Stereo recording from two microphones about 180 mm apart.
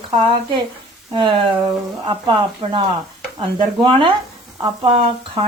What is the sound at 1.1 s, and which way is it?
Speech, 30° right (ahead or behind).